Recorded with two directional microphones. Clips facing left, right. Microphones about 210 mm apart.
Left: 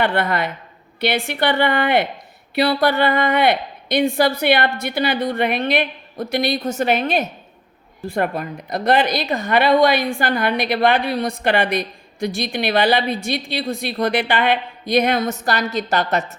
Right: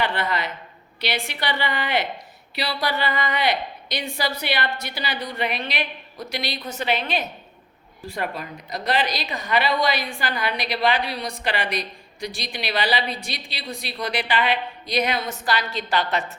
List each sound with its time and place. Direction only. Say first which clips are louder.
0.0 s a woman's voice: left 6 dB; 55° left (ahead or behind)